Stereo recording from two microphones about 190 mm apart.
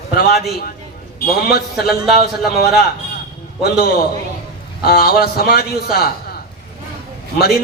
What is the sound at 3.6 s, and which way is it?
A man's voice, 55° left (ahead or behind).